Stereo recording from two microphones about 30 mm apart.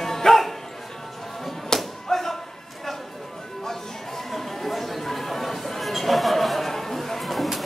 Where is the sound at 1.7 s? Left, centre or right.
Centre.